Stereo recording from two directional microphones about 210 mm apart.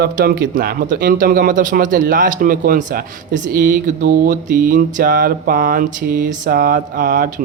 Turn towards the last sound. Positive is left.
turn(degrees=-40)  # may be behind; listen again after turning